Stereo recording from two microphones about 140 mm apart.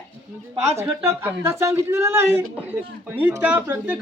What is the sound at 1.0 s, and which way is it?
A man's voice, 15° right (ahead or behind).